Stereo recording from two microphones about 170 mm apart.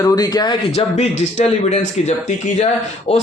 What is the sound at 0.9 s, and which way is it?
Speech, 40° left (ahead or behind).